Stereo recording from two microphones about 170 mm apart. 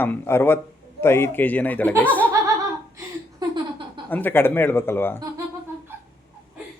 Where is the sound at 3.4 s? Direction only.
25° right (ahead or behind).